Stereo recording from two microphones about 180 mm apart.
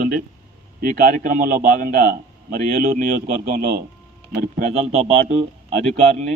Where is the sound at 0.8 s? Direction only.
50° right (ahead or behind).